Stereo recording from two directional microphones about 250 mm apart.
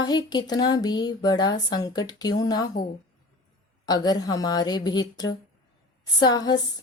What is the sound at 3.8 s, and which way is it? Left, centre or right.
Speech, centre.